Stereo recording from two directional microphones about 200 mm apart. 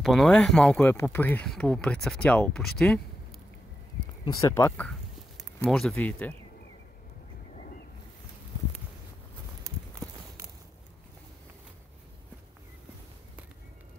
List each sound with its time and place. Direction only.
0.0 s speech: centre (ahead or behind)
4.3 s speech: 15° left (ahead or behind)
7.5 s boat: 40° left (ahead or behind)
9.6 s walk: 15° right (ahead or behind)